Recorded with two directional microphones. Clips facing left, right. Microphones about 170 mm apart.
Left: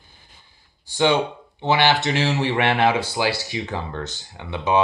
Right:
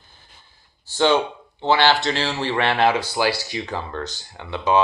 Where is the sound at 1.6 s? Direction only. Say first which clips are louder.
Right 1 dB; 15° left (ahead or behind).